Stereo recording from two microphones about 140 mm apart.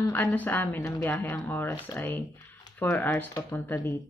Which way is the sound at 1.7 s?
25° left (ahead or behind).